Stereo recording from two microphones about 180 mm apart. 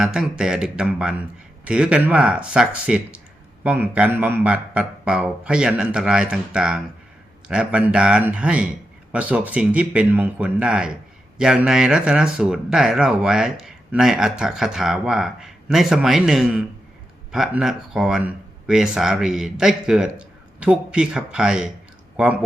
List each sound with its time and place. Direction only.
0.0 s speech: 5° right (ahead or behind)